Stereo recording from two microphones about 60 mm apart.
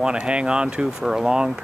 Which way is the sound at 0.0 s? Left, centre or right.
Centre.